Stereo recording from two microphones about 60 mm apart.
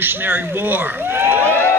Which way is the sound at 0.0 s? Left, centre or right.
Right.